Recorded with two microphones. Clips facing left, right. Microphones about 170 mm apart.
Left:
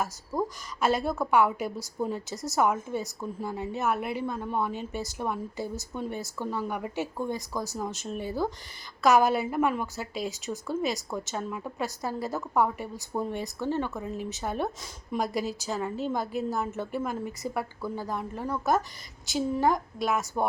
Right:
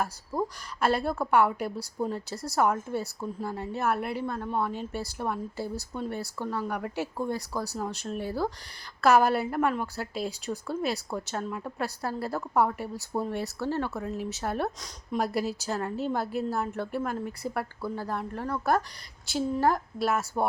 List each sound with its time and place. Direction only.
0.0 s a woman's voice: centre (ahead or behind)
2.3 s a woman's voice: 20° left (ahead or behind)
2.6 s a woman's voice: 5° left (ahead or behind)